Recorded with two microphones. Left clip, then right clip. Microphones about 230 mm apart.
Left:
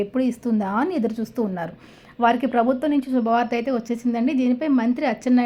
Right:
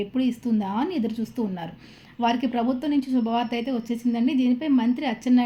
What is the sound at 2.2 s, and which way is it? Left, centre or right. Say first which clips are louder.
A woman's voice: left 5 dB; centre.